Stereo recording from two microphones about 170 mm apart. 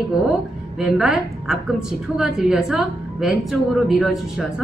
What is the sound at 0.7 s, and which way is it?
A woman's voice, 5° right (ahead or behind).